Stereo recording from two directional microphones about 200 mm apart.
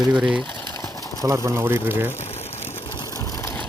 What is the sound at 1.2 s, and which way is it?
Speech, 15° right (ahead or behind).